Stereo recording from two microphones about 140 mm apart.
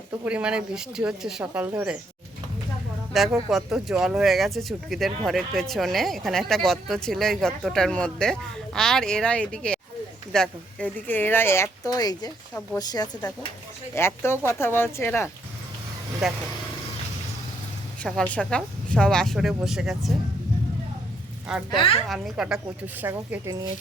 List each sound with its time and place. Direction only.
0.3 s speech: 5° right (ahead or behind)
3.1 s a woman's voice: centre (ahead or behind); by 15.3 s 15° left (ahead or behind)
16.2 s speech: centre (ahead or behind)
18.0 s speech: 10° left (ahead or behind)
21.4 s speech: 5° right (ahead or behind)